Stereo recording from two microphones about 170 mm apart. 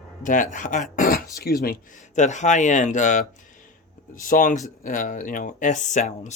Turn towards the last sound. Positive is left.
turn(degrees=45)  # may be behind; listen again after turning